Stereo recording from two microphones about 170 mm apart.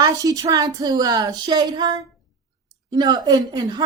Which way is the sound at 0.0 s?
20° right (ahead or behind).